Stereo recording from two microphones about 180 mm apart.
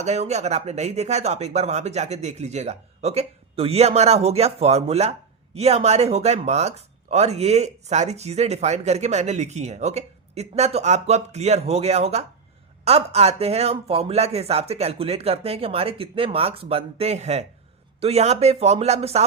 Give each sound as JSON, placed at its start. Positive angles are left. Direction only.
{"t": 0.0, "sound": "speech", "side_deg": -40}